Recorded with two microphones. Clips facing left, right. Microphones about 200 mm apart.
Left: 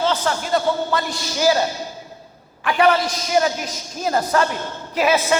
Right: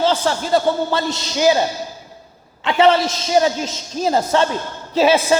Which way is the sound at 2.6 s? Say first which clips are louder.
Right 3 dB; 25° right (ahead or behind).